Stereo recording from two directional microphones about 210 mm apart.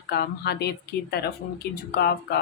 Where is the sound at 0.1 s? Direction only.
50° left (ahead or behind).